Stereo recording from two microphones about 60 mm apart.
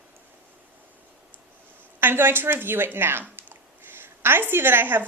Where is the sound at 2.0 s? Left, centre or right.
Right.